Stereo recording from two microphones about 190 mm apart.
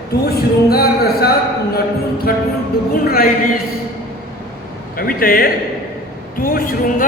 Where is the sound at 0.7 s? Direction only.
55° left (ahead or behind).